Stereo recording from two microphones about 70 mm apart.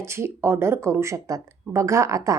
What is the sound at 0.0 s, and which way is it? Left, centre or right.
Speech, right.